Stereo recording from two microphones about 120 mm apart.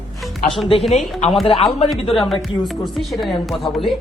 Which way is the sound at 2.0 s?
45° left (ahead or behind).